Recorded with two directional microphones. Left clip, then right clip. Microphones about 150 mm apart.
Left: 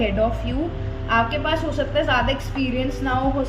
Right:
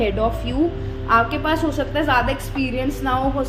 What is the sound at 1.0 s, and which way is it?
A woman's voice, 45° right (ahead or behind).